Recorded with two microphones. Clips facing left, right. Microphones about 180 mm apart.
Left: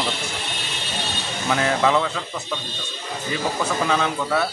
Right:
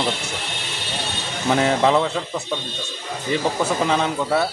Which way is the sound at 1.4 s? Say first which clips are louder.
Right 3 dB; 25° right (ahead or behind).